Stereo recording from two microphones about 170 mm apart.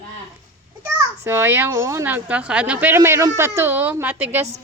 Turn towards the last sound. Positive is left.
turn(degrees=-10)  # may be behind; listen again after turning